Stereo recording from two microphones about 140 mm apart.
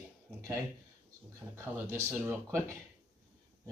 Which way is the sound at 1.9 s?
20° right (ahead or behind).